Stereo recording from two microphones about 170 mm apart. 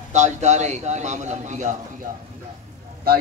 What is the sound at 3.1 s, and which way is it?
Speech, 60° right (ahead or behind).